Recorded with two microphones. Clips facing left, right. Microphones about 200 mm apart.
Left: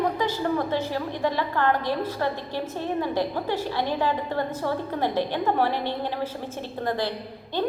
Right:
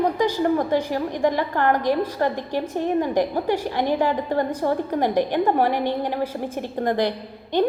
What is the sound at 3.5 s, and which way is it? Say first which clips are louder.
Speech: right 4 dB; 15° right (ahead or behind).